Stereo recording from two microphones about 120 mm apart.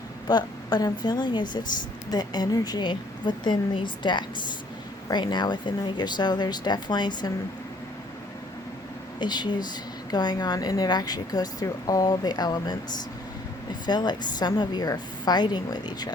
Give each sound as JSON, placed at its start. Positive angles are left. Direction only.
{"t": 0.3, "sound": "speech", "side_deg": 35}
{"t": 9.1, "sound": "speech", "side_deg": 35}
{"t": 13.8, "sound": "speech", "side_deg": 35}